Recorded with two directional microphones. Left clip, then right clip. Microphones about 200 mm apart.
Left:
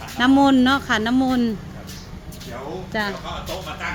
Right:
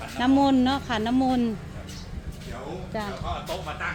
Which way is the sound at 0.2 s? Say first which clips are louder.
Left 5 dB; 10° left (ahead or behind).